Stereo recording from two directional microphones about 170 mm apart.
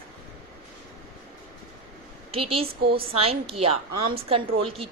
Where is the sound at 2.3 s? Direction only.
35° right (ahead or behind).